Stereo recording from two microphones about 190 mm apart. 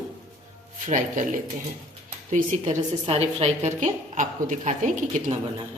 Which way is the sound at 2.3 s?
40° right (ahead or behind).